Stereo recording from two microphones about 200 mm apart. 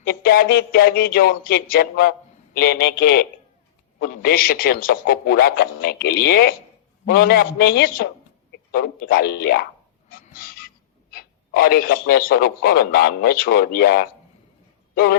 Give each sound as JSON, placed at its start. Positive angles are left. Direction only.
{"t": 0.0, "sound": "a man's voice", "side_deg": 50}
{"t": 10.1, "sound": "a sound", "side_deg": 45}
{"t": 11.1, "sound": "a man's voice", "side_deg": 45}